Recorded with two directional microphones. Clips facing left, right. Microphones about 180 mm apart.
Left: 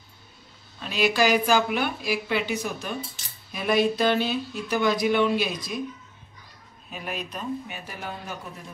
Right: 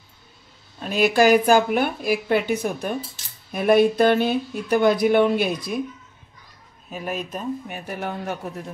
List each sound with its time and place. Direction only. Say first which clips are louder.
0.7 s a woman's voice: right 5 dB; 50° right (ahead or behind)
6.9 s a woman's voice: right 5 dB; 45° right (ahead or behind)